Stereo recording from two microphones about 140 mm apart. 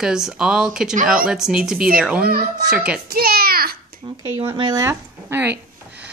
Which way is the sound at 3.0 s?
90° right.